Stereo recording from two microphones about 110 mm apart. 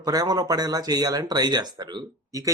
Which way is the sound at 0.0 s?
35° right (ahead or behind).